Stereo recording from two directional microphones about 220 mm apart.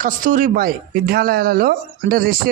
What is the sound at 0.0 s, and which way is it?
Speech, 35° right (ahead or behind).